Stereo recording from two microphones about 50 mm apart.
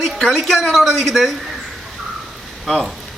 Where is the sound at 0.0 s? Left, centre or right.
Centre.